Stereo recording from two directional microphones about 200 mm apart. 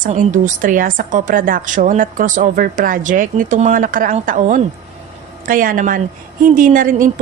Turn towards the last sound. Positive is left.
turn(degrees=-40)  # may be behind; listen again after turning